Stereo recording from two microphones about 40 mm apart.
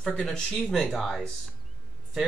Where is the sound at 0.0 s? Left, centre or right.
Left.